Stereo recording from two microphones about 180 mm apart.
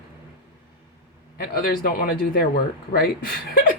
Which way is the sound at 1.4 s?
55° left (ahead or behind).